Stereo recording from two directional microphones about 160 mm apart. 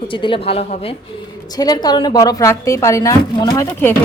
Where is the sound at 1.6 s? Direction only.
25° left (ahead or behind).